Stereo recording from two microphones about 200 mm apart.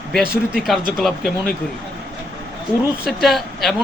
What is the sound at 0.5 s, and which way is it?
Speech, centre (ahead or behind).